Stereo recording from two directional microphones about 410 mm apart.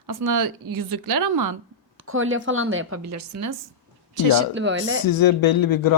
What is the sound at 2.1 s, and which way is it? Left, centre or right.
Speech, right.